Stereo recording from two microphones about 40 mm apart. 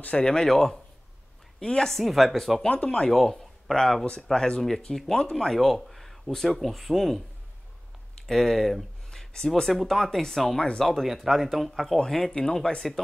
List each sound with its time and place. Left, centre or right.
0.2 s speech: centre
0.5 s speech: centre
2.0 s speech: centre
2.7 s speech: left
3.1 s speech: centre
8.3 s speech: centre